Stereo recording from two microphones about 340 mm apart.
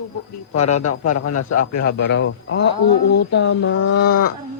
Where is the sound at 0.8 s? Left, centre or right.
Left.